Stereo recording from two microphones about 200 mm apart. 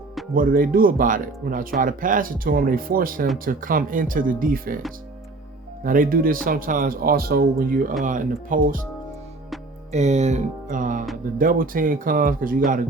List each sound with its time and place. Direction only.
0.3 s speech: 45° right (ahead or behind)
5.8 s speech: 45° right (ahead or behind)
9.9 s speech: 35° right (ahead or behind)